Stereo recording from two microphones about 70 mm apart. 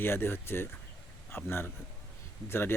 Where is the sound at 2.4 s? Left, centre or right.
Left.